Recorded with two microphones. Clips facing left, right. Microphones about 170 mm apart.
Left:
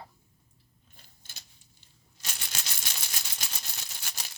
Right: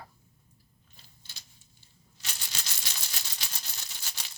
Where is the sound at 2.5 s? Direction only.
50° left (ahead or behind).